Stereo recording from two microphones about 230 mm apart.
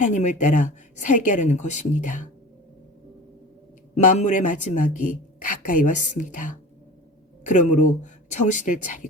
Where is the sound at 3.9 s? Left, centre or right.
Left.